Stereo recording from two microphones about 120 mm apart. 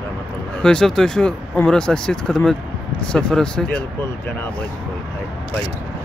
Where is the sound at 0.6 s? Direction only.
5° left (ahead or behind).